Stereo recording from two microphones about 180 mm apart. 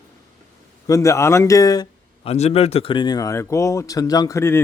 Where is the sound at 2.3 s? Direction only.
35° left (ahead or behind).